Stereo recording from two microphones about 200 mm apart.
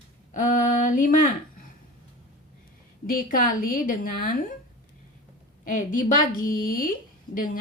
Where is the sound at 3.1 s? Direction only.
45° left (ahead or behind).